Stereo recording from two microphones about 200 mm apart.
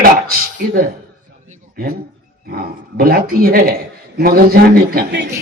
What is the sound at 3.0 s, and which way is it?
A man's voice, 50° right (ahead or behind).